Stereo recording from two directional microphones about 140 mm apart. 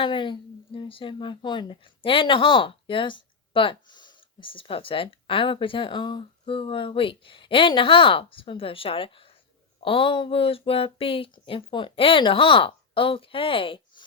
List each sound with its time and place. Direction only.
0.0 s speech: 35° left (ahead or behind)